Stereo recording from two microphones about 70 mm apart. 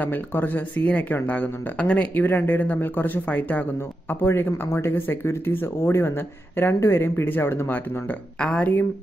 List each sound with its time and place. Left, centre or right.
0.0 s speech: left
4.1 s speech: left
8.4 s speech: centre